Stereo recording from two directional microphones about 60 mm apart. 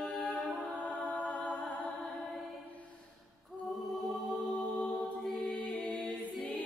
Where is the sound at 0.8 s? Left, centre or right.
Left.